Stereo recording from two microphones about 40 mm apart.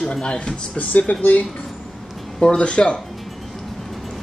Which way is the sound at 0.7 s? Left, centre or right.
Left.